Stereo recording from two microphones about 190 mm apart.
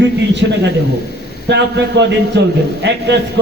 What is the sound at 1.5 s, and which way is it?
A man's voice, 70° right (ahead or behind).